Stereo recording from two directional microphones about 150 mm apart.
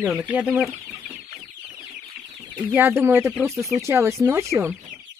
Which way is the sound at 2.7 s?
15° right (ahead or behind).